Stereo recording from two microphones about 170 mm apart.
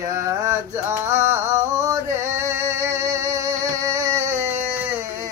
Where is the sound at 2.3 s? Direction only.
15° right (ahead or behind).